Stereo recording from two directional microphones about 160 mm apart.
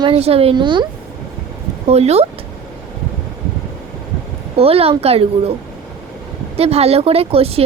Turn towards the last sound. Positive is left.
turn(degrees=-40)  # may be behind; listen again after turning